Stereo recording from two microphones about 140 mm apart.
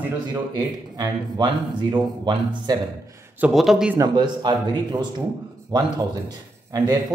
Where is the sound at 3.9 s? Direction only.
30° right (ahead or behind).